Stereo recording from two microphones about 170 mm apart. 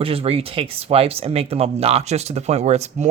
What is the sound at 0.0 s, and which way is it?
Speech, 35° right (ahead or behind).